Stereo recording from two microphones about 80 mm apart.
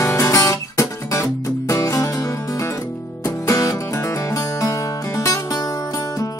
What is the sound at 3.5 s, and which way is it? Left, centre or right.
Music, left.